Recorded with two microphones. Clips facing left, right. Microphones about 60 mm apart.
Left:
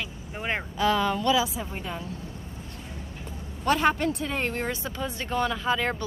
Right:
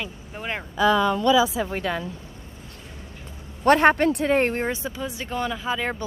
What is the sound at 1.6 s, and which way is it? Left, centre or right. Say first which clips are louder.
Speech: right 8 dB; right.